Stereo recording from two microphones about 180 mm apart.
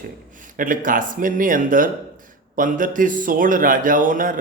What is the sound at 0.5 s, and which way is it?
Speech, 50° right (ahead or behind).